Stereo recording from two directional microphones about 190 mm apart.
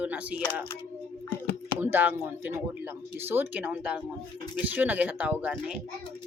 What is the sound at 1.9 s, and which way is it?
Speech, 10° right (ahead or behind).